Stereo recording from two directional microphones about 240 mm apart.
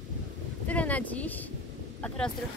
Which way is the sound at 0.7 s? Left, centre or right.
Centre.